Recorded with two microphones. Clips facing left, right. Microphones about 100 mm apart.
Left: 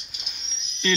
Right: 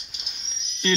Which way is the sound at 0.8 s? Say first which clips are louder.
Right 1 dB; 30° right (ahead or behind).